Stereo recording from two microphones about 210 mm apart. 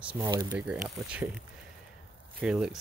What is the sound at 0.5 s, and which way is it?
Speech, 5° right (ahead or behind).